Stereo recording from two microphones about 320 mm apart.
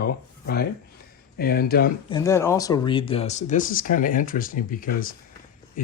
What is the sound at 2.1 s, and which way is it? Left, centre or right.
Speech, centre.